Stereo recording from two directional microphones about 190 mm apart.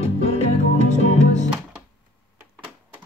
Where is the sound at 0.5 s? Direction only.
35° left (ahead or behind).